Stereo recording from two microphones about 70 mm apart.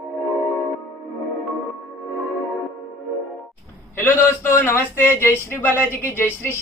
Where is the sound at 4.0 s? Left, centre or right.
Left.